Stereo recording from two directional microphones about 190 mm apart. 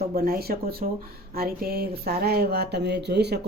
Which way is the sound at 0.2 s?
50° right (ahead or behind).